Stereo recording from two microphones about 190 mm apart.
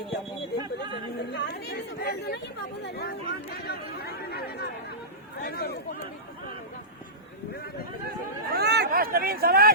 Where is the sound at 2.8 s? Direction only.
55° left (ahead or behind).